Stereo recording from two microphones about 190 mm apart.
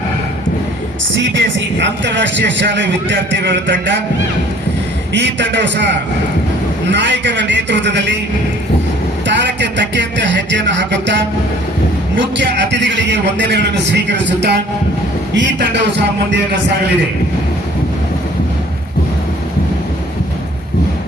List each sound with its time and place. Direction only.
1.1 s speech: 75° right (ahead or behind)
5.1 s speech: 65° right (ahead or behind)
6.9 s speech: 70° right (ahead or behind)
9.2 s speech: 70° right (ahead or behind)